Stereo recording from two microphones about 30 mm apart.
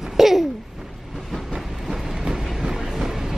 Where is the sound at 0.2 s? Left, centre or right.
Centre.